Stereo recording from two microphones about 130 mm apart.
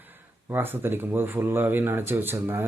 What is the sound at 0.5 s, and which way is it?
Speech, 15° right (ahead or behind).